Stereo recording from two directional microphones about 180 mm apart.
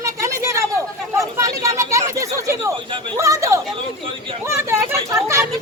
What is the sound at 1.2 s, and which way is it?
Chatter, 15° right (ahead or behind).